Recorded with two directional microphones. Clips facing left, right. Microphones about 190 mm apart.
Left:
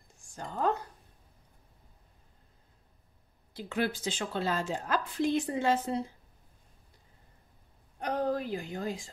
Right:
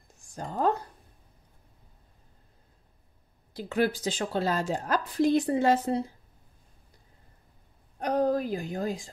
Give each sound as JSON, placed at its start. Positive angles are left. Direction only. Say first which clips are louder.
{"t": 0.4, "sound": "a woman's voice", "louder": "right 3 dB", "side_deg": -35}
{"t": 3.5, "sound": "a woman's voice", "louder": "right 5 dB", "side_deg": -40}
{"t": 8.0, "sound": "a woman's voice", "louder": "right 5 dB", "side_deg": -40}